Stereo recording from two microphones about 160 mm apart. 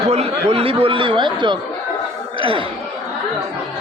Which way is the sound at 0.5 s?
35° right (ahead or behind).